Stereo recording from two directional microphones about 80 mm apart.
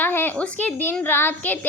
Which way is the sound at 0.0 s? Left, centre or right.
Left.